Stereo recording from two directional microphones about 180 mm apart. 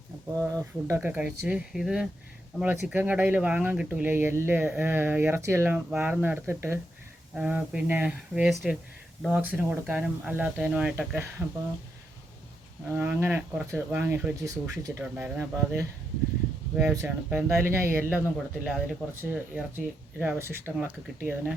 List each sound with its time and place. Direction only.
0.3 s speech: 5° left (ahead or behind)
0.6 s speech: 10° right (ahead or behind)
12.9 s speech: 15° right (ahead or behind)
19.2 s speech: 10° right (ahead or behind)